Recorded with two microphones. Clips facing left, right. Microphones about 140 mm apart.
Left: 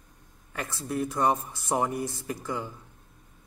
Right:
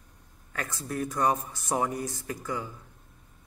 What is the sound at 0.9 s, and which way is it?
A man's voice, 10° left (ahead or behind).